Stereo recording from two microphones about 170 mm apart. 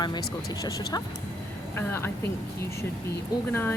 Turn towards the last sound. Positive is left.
turn(degrees=15)  # may be behind; listen again after turning